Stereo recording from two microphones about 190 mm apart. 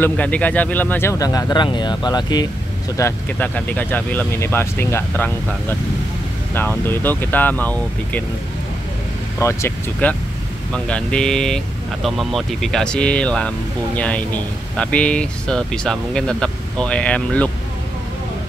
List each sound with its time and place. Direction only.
0.0 s speech: 5° left (ahead or behind)
3.0 s speech: 10° left (ahead or behind)
9.4 s speech: 15° left (ahead or behind)